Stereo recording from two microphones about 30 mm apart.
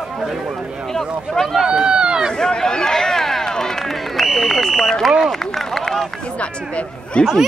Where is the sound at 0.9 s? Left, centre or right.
Centre.